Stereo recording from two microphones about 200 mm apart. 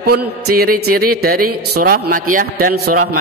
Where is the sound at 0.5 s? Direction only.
50° right (ahead or behind).